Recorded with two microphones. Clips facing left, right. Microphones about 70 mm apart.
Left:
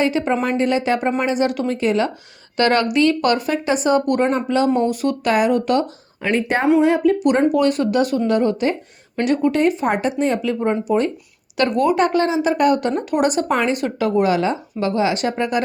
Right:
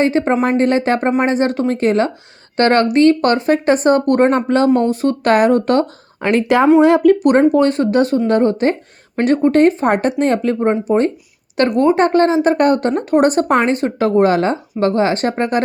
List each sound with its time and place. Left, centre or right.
0.0 s speech: right
6.2 s speech: right
7.2 s speech: right
7.5 s speech: right